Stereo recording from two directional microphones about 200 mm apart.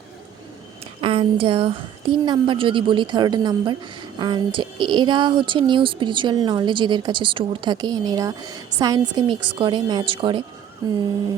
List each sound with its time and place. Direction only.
1.0 s speech: 25° right (ahead or behind)